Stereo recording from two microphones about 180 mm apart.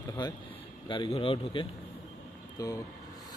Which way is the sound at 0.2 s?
25° left (ahead or behind).